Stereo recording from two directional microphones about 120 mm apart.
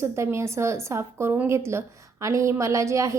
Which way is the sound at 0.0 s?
25° right (ahead or behind).